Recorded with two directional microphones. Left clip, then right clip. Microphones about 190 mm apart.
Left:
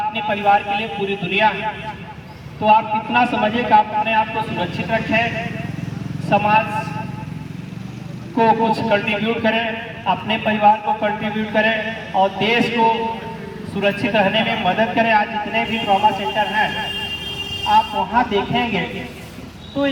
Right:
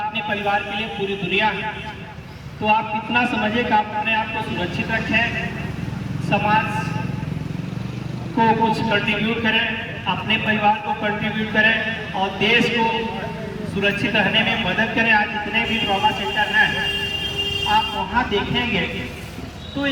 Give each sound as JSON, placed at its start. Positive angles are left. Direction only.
{"t": 0.1, "sound": "a man's voice", "side_deg": 30}
{"t": 6.3, "sound": "speech", "side_deg": 30}
{"t": 8.4, "sound": "a man's voice", "side_deg": 35}
{"t": 14.6, "sound": "speech", "side_deg": 35}
{"t": 15.1, "sound": "a man's voice", "side_deg": 45}
{"t": 17.7, "sound": "vehicle", "side_deg": 30}
{"t": 18.3, "sound": "a man's voice", "side_deg": 45}